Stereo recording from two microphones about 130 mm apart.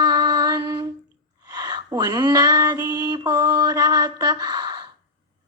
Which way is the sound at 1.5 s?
30° right (ahead or behind).